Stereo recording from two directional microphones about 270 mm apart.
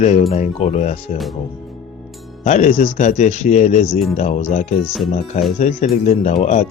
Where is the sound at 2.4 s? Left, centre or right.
Left.